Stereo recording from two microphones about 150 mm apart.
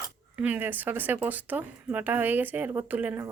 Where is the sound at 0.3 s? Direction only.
10° right (ahead or behind).